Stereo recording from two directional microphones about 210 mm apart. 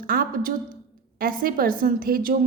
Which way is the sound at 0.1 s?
45° right (ahead or behind).